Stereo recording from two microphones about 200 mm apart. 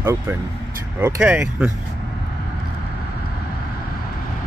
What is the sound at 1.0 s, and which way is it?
Speech, 10° right (ahead or behind).